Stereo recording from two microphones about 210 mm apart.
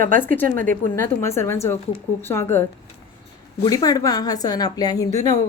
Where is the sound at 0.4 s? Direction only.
40° right (ahead or behind).